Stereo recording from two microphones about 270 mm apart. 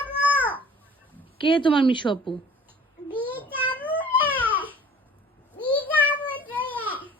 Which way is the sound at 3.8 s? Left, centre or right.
Centre.